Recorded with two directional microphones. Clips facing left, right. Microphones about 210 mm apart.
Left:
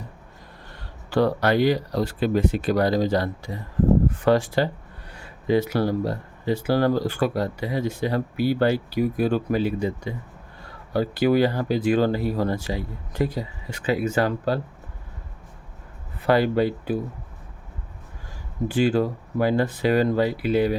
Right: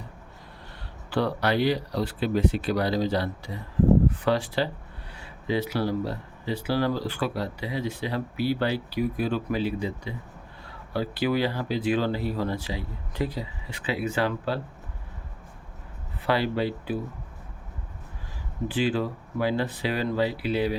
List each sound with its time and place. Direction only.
1.1 s speech: 45° left (ahead or behind)
16.2 s speech: 45° left (ahead or behind)
18.7 s speech: 45° left (ahead or behind)